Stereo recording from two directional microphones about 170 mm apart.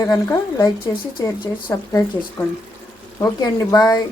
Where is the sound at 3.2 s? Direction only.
20° left (ahead or behind).